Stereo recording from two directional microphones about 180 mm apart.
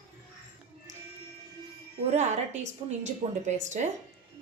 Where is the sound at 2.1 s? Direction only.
40° right (ahead or behind).